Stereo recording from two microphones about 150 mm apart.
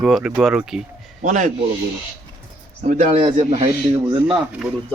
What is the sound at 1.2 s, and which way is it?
Speech, 55° right (ahead or behind).